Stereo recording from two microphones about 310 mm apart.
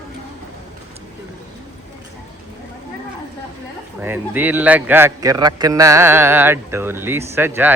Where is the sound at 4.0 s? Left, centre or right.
Centre.